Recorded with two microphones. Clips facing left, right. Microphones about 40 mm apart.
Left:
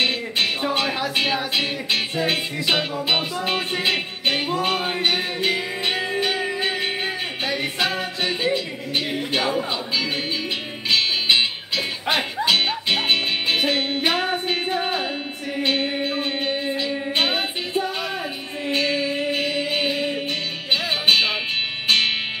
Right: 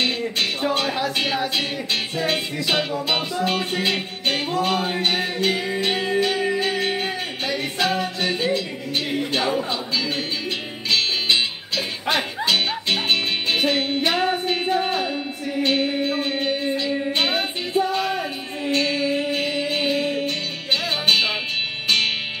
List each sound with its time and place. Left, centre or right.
0.0 s music: centre
10.9 s music: centre